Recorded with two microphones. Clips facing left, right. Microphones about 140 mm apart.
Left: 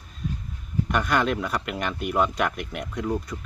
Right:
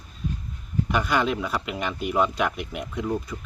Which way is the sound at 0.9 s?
5° right (ahead or behind).